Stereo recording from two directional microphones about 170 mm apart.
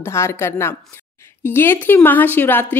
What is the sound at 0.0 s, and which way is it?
A woman's voice, 15° left (ahead or behind).